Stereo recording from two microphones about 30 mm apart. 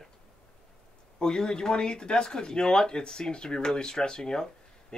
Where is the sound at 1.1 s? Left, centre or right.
Left.